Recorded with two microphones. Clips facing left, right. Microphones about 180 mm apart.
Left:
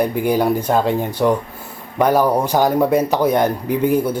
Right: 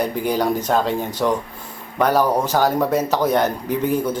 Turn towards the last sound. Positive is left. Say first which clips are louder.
# left 3 dB
turn(degrees=10)  # may be behind; listen again after turning